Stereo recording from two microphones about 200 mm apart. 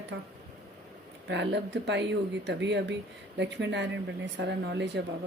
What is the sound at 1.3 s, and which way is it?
A woman's voice, 60° right (ahead or behind).